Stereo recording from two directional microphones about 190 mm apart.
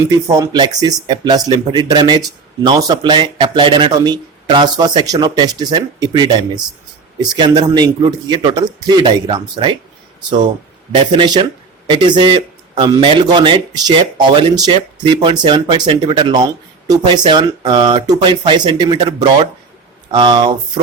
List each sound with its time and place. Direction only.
0.3 s speech: 20° right (ahead or behind)
10.9 s speech: 25° right (ahead or behind)